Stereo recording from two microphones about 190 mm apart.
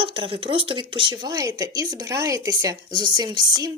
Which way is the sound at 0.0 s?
25° right (ahead or behind).